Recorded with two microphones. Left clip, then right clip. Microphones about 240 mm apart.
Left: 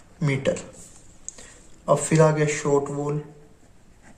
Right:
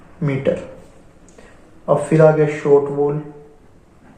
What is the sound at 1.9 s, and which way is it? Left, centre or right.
Speech, left.